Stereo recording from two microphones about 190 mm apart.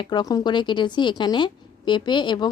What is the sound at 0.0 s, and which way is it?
A woman's voice, 20° left (ahead or behind).